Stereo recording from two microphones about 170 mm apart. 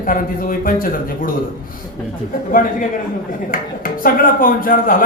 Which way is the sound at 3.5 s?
55° left (ahead or behind).